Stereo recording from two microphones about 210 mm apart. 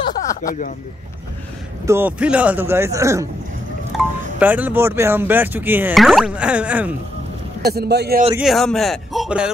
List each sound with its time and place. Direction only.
0.0 s a sound: 20° left (ahead or behind)
1.9 s speech: 10° right (ahead or behind)
7.6 s speech: 50° right (ahead or behind)
8.4 s speech: centre (ahead or behind)